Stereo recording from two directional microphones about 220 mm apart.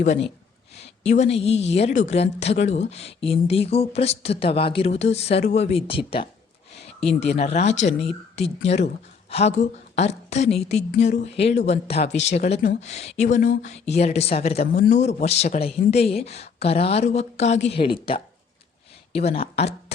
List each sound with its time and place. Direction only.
0.0 s a woman's voice: 30° left (ahead or behind)